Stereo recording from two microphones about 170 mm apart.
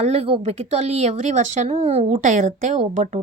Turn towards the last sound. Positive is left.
turn(degrees=-45)  # may be behind; listen again after turning